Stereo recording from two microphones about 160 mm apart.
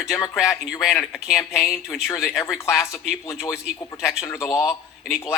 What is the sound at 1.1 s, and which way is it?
Speech, 5° right (ahead or behind).